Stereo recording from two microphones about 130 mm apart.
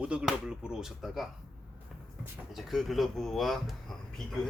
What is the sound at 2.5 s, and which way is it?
Speech, centre (ahead or behind).